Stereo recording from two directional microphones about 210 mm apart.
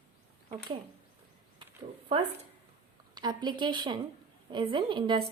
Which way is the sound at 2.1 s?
25° right (ahead or behind).